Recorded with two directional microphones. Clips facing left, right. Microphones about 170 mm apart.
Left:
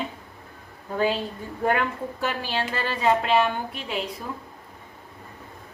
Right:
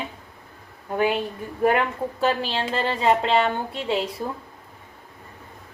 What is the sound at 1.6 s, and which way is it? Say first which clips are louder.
A woman's voice: right 3 dB; 20° right (ahead or behind).